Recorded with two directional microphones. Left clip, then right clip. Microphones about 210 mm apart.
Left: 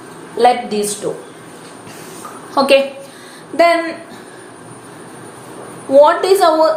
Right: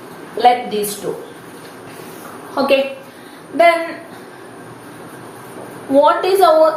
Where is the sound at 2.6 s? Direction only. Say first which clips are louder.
Left 4 dB; 50° left (ahead or behind).